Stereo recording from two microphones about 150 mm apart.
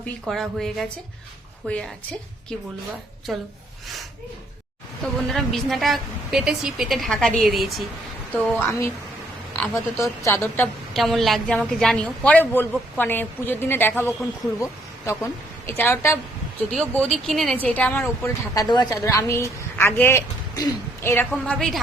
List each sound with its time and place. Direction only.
0.3 s a woman's voice: centre (ahead or behind)
3.3 s a woman's voice: centre (ahead or behind)
5.3 s a woman's voice: centre (ahead or behind)
8.3 s a woman's voice: 10° left (ahead or behind)
10.9 s a woman's voice: centre (ahead or behind)
16.7 s a woman's voice: 5° left (ahead or behind)
18.5 s a woman's voice: 25° left (ahead or behind); by 21.8 s 5° left (ahead or behind)